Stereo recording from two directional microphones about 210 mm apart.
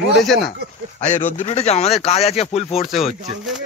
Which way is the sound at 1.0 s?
35° left (ahead or behind).